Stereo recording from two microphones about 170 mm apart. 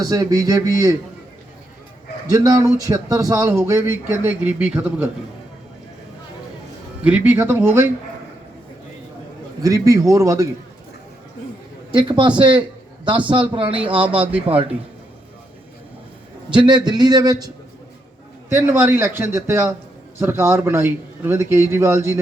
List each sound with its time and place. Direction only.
0.0 s a man's voice: 20° right (ahead or behind)
2.7 s speech: 20° right (ahead or behind)
7.0 s speech: 10° right (ahead or behind)
9.6 s a man's voice: 20° right (ahead or behind)
11.9 s a man's voice: 30° right (ahead or behind)
13.8 s speech: 10° right (ahead or behind)
16.5 s a man's voice: 25° right (ahead or behind)